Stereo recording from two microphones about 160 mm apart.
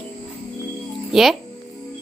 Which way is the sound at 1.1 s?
Centre (ahead or behind).